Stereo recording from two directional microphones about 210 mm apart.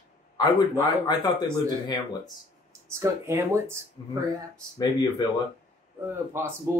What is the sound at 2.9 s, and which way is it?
Speech, 10° right (ahead or behind).